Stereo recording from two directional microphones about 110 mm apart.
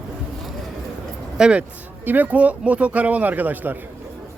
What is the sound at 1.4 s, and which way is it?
A man's voice, 10° right (ahead or behind).